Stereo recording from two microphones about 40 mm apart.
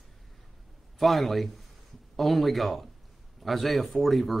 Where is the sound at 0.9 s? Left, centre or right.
Centre.